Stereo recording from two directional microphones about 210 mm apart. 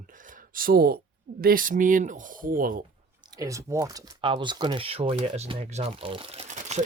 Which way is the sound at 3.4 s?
15° right (ahead or behind).